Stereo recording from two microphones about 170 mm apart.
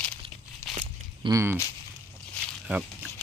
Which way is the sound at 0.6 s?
15° left (ahead or behind).